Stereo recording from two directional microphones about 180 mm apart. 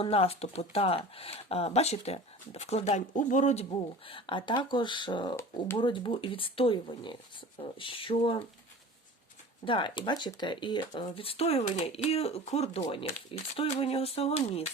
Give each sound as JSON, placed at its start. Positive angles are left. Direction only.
{"t": 0.0, "sound": "speech", "side_deg": 35}
{"t": 9.6, "sound": "speech", "side_deg": 25}